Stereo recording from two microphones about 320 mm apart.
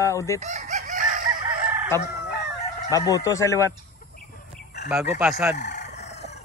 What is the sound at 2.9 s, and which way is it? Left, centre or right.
Speech, centre.